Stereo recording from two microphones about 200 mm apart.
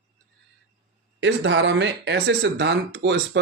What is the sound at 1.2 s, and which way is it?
Speech, 65° right (ahead or behind).